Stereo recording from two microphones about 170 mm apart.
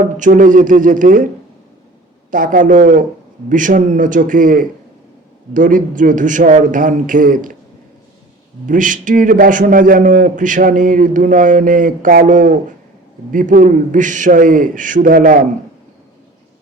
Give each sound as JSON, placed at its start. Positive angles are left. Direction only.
{"t": 0.2, "sound": "a man's voice", "side_deg": -50}
{"t": 2.3, "sound": "a man's voice", "side_deg": -50}
{"t": 8.6, "sound": "a man's voice", "side_deg": -50}